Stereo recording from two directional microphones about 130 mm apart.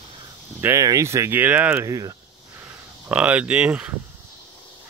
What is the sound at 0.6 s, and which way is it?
Speech, 25° right (ahead or behind).